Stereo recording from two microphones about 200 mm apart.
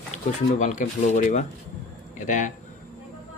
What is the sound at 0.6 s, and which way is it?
Speech, 40° left (ahead or behind).